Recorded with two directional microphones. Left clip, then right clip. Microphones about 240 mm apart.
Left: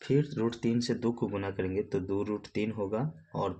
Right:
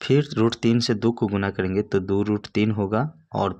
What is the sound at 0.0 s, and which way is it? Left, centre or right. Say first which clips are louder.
Speech: right 9 dB; right.